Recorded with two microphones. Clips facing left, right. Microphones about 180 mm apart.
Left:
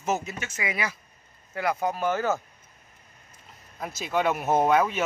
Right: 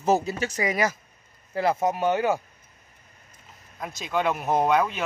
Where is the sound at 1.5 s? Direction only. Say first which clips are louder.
Right 4 dB; 25° right (ahead or behind).